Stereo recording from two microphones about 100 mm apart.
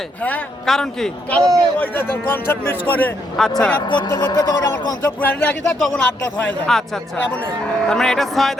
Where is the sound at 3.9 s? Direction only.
45° left (ahead or behind).